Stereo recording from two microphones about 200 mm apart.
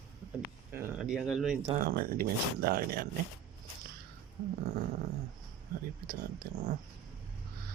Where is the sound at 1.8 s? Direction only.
50° right (ahead or behind).